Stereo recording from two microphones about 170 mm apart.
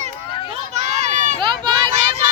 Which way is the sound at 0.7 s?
40° right (ahead or behind).